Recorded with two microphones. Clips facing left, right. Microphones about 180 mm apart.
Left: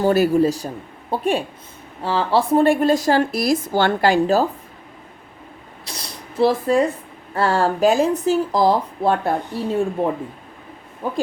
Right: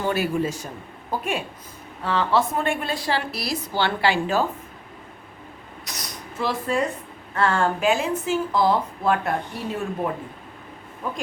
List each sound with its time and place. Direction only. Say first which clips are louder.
0.0 s a woman's voice: left 8 dB; 40° left (ahead or behind)
5.8 s a sound: left 2 dB; 30° left (ahead or behind)
7.3 s speech: left 3 dB; 35° left (ahead or behind)